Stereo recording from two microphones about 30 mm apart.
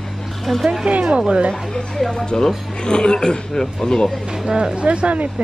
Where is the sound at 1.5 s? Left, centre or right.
Left.